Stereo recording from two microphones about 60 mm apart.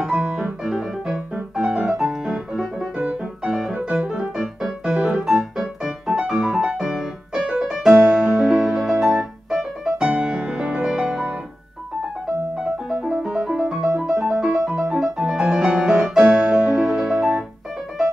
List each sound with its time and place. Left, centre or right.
0.0 s piano: centre
3.5 s music: centre
3.9 s music: centre
6.8 s piano: centre
12.5 s music: right; by 17.4 s centre